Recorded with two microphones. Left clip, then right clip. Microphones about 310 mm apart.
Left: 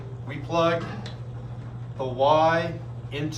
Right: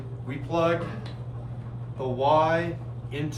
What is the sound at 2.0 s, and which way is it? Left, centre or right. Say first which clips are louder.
Speech: left 2 dB; centre.